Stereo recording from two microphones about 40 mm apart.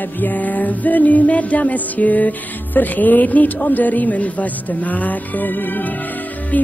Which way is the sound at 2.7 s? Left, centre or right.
Left.